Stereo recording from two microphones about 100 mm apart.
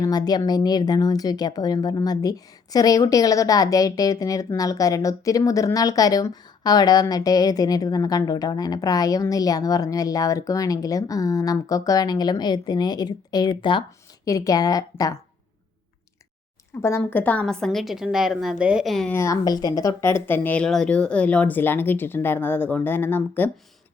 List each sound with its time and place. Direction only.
0.0 s a woman's voice: 40° left (ahead or behind)
14.3 s a woman's voice: 35° left (ahead or behind)
16.8 s speech: 25° left (ahead or behind)
17.4 s a woman's voice: 5° left (ahead or behind)
19.1 s speech: 30° left (ahead or behind)